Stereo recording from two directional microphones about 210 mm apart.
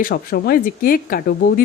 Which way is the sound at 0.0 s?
45° left (ahead or behind).